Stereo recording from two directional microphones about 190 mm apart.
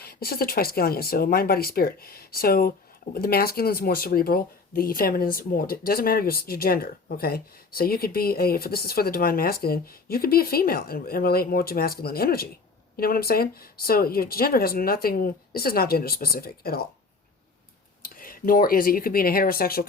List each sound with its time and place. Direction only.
0.0 s speech: 50° left (ahead or behind)
18.0 s speech: 50° left (ahead or behind)